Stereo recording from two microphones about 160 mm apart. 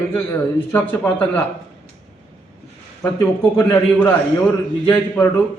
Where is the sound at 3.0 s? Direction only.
15° left (ahead or behind).